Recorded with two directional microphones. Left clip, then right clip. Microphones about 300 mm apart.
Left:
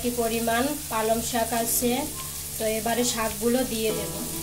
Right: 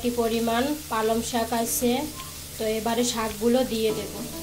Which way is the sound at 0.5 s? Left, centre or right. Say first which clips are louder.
Even; centre.